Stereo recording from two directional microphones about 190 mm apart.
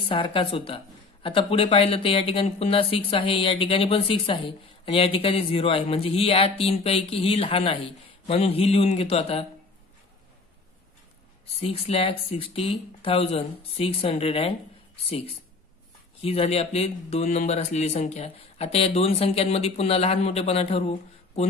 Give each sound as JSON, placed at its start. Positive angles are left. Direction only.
{"t": 0.1, "sound": "speech", "side_deg": 25}
{"t": 11.4, "sound": "speech", "side_deg": 30}